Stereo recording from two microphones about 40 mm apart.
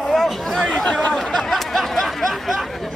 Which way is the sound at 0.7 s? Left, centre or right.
Left.